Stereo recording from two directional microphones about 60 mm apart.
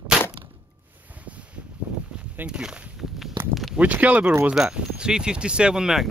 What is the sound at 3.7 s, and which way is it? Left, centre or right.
Speech, right.